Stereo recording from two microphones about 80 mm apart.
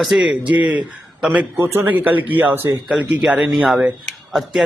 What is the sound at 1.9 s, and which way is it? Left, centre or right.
Speech, right.